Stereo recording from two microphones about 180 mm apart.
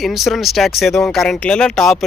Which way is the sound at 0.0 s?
Centre (ahead or behind).